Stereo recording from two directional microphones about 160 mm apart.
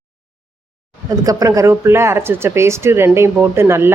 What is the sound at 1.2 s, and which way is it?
Speech, 20° right (ahead or behind).